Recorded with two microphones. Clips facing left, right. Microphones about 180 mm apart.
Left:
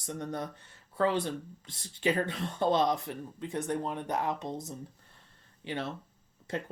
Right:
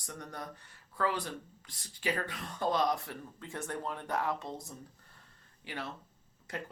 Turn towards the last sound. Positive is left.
turn(degrees=25)  # may be behind; listen again after turning